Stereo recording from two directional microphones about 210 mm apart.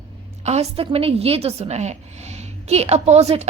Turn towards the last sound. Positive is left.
turn(degrees=-30)  # may be behind; listen again after turning